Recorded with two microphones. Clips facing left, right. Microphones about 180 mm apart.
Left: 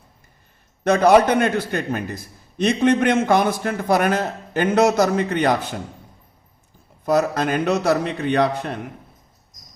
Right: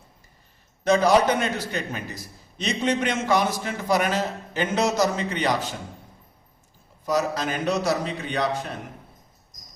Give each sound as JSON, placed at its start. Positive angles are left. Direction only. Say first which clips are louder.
{"t": 0.9, "sound": "a man's voice", "louder": "left 4 dB", "side_deg": 60}
{"t": 7.0, "sound": "a man's voice", "louder": "left 5 dB", "side_deg": 55}